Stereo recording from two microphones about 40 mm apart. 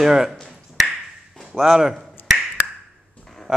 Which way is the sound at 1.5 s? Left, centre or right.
Centre.